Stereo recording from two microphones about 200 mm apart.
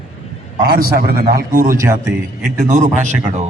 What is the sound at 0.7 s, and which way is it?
Speech, 50° right (ahead or behind).